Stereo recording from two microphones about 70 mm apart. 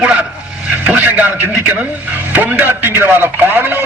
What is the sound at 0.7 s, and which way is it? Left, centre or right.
A man's voice, right.